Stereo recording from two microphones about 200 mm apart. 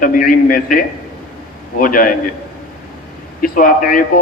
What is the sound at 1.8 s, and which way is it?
Speech, 45° left (ahead or behind).